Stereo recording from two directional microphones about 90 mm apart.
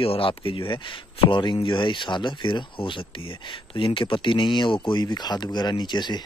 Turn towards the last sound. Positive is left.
turn(degrees=55)  # may be behind; listen again after turning